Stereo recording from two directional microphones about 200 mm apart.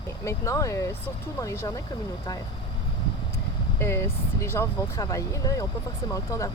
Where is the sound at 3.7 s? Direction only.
15° left (ahead or behind).